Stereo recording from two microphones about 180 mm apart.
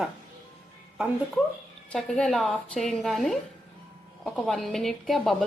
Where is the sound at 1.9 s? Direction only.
5° left (ahead or behind).